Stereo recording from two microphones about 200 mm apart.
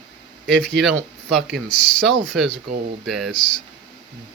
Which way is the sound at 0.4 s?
Centre (ahead or behind).